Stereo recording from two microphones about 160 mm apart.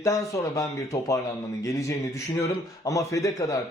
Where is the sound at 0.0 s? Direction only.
20° left (ahead or behind).